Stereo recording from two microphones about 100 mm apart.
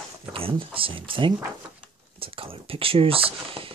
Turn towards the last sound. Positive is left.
turn(degrees=-65)  # may be behind; listen again after turning